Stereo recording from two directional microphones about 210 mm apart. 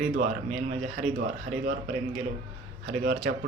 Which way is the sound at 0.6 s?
35° right (ahead or behind).